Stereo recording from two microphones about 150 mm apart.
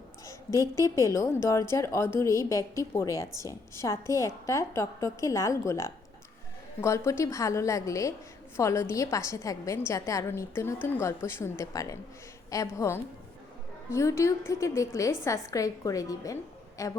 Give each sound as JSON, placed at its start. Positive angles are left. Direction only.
{"t": 0.8, "sound": "a woman's voice", "side_deg": 20}